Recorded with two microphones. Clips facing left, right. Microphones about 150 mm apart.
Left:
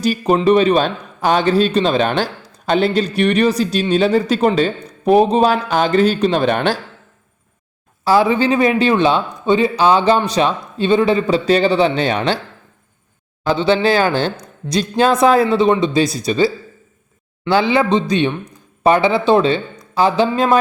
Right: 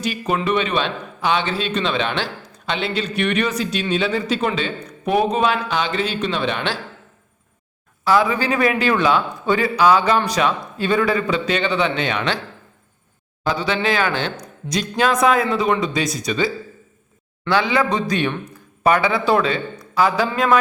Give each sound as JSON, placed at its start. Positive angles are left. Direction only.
{"t": 0.0, "sound": "a man's voice", "side_deg": 35}
{"t": 8.0, "sound": "a man's voice", "side_deg": 30}
{"t": 13.5, "sound": "a man's voice", "side_deg": 30}
{"t": 17.5, "sound": "a man's voice", "side_deg": 25}